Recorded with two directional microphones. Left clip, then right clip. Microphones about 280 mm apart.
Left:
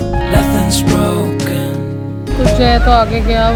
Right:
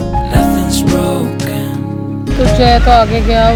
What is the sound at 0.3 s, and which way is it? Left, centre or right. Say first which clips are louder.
Music: right 1 dB; centre.